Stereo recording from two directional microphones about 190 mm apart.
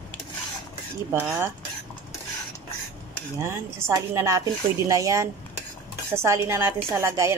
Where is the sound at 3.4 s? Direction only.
15° right (ahead or behind).